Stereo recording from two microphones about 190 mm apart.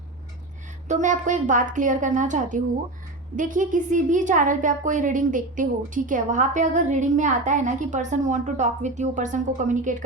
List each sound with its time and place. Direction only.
0.9 s a woman's voice: 40° right (ahead or behind)